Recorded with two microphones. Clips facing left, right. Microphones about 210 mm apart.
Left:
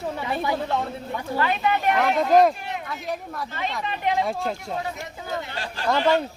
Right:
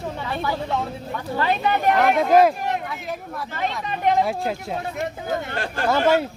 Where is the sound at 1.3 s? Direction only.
35° right (ahead or behind).